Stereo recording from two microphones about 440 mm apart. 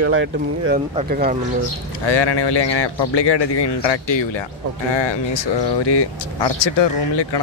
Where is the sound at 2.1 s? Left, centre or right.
Left.